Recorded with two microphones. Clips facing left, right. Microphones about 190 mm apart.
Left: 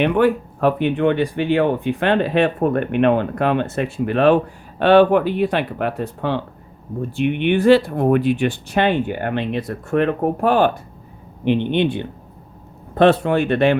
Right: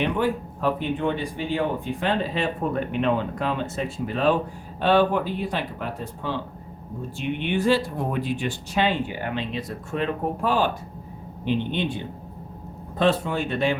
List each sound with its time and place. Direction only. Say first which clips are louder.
0.0 s speech: left 8 dB; 65° left (ahead or behind)